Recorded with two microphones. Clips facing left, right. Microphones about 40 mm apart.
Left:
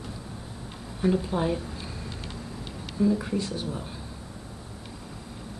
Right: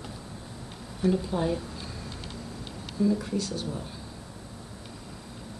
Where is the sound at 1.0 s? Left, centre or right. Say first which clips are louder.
Left 1 dB; centre.